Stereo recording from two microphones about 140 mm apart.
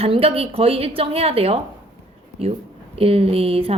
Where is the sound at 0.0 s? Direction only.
40° right (ahead or behind).